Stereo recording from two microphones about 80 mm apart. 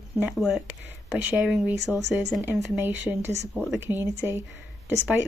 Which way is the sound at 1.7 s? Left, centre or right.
Centre.